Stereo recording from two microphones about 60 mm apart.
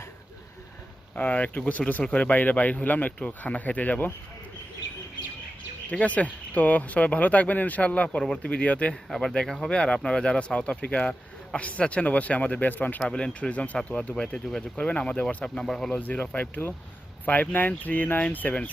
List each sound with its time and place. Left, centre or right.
1.1 s speech: left
5.9 s speech: left
9.0 s speech: centre
9.3 s speech: centre
13.1 s speech: centre
15.4 s speech: centre
15.9 s speech: left